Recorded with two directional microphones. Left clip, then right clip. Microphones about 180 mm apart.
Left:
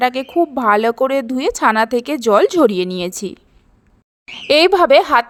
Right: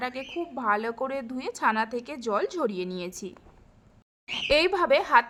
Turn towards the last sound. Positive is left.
turn(degrees=40)  # may be behind; listen again after turning